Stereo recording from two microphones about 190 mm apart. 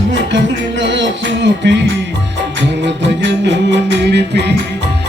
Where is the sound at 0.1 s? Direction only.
70° right (ahead or behind).